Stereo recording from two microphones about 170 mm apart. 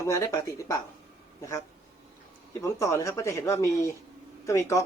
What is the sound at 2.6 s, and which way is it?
Speech, 15° left (ahead or behind).